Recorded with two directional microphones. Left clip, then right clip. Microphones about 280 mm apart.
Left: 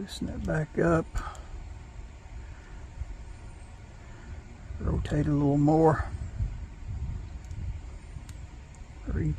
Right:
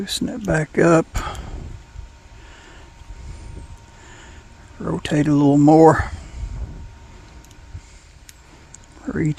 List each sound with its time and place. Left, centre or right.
0.0 s speech: right
0.5 s speech: right
5.0 s speech: right
5.3 s speech: right
9.0 s a sound: right